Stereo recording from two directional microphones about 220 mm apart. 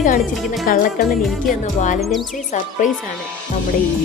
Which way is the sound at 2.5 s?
35° left (ahead or behind).